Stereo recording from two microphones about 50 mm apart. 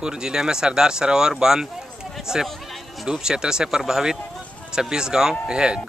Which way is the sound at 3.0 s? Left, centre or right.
Centre.